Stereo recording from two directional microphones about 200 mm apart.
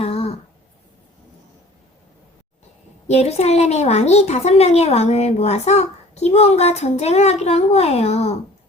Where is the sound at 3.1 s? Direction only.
30° left (ahead or behind).